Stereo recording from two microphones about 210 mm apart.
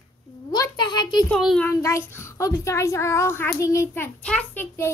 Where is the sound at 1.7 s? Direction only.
15° left (ahead or behind).